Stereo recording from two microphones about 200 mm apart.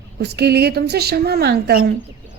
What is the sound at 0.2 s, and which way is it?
A woman's voice, 55° right (ahead or behind).